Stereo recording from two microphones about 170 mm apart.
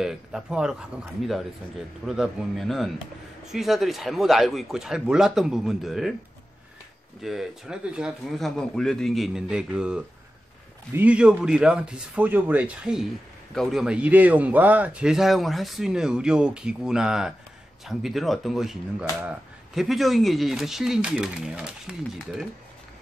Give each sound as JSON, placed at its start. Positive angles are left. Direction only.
{"t": 0.0, "sound": "speech", "side_deg": -5}
{"t": 7.2, "sound": "speech", "side_deg": 0}